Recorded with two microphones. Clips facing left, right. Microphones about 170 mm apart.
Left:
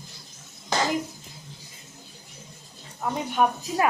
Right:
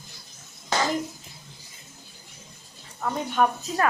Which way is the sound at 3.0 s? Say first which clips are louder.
Even; 10° left (ahead or behind).